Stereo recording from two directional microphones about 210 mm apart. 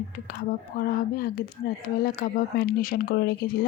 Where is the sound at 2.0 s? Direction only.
45° left (ahead or behind).